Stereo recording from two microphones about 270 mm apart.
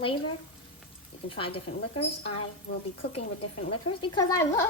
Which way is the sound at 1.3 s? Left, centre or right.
Centre.